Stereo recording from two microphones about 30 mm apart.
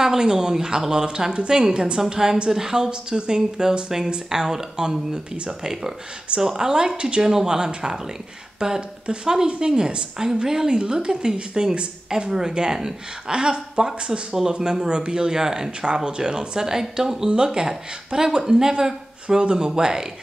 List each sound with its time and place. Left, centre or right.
0.0 s speech: centre
2.0 s a woman's voice: centre
7.2 s a woman's voice: centre
12.3 s speech: centre
17.3 s speech: right